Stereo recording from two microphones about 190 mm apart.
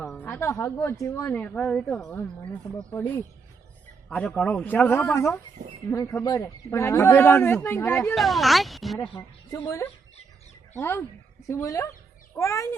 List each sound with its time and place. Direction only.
0.0 s a sound: 5° left (ahead or behind)
0.3 s a woman's voice: 15° left (ahead or behind)
4.1 s a woman's voice: 5° left (ahead or behind)
8.1 s speech: centre (ahead or behind)
9.0 s a woman's voice: 15° left (ahead or behind)